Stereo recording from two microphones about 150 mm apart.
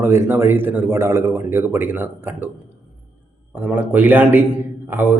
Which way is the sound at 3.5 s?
10° right (ahead or behind).